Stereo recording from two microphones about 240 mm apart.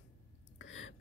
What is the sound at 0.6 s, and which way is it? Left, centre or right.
Whispering, left.